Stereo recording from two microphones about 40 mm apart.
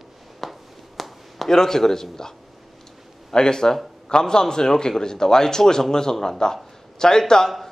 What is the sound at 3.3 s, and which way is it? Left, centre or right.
A man's voice, centre.